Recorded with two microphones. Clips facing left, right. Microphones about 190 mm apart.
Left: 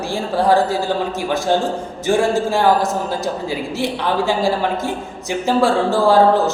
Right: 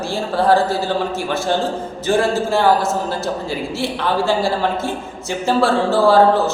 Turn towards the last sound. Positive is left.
turn(degrees=15)  # may be behind; listen again after turning